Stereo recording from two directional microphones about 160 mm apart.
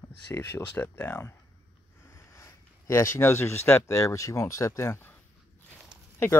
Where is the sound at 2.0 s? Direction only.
15° left (ahead or behind).